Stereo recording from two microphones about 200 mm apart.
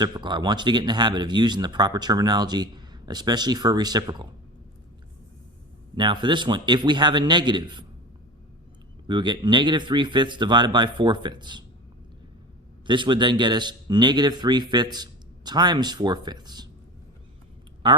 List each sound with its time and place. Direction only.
0.0 s speech: 20° right (ahead or behind)
5.9 s speech: 25° right (ahead or behind)
9.0 s speech: 25° right (ahead or behind)
12.9 s speech: 25° right (ahead or behind)